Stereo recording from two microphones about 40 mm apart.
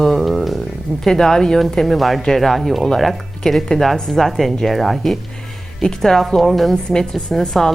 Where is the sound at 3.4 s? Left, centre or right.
Centre.